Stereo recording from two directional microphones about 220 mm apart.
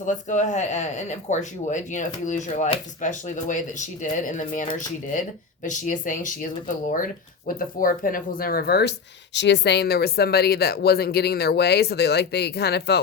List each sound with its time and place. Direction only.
0.0 s speech: 35° left (ahead or behind)
5.6 s speech: 35° left (ahead or behind)